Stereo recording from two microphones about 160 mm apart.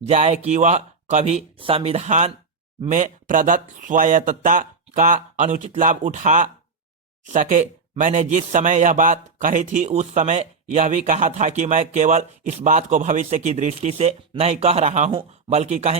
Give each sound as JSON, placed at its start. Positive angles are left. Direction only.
{"t": 0.1, "sound": "a man's voice", "side_deg": -45}